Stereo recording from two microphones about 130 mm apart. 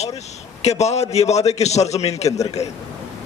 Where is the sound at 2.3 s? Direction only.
25° left (ahead or behind).